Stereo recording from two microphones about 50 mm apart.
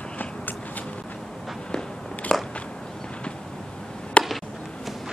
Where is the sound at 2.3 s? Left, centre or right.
Centre.